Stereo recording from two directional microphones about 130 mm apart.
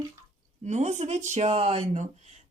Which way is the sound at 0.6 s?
65° right (ahead or behind).